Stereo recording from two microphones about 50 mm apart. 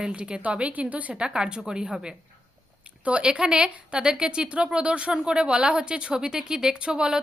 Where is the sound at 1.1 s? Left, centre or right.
Centre.